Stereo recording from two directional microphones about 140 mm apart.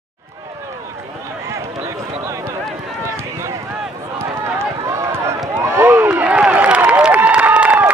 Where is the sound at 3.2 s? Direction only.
20° right (ahead or behind).